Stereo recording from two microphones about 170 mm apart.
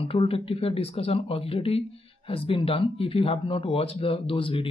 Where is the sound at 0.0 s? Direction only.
35° left (ahead or behind).